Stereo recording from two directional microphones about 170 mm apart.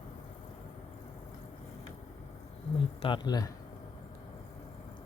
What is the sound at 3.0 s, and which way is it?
Speech, 25° left (ahead or behind).